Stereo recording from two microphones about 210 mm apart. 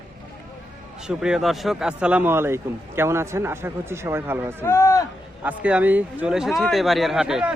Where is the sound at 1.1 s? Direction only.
5° right (ahead or behind).